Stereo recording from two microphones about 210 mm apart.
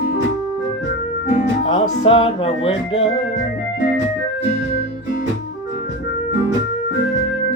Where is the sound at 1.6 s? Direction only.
25° left (ahead or behind).